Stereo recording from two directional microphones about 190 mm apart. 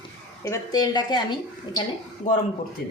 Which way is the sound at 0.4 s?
20° left (ahead or behind).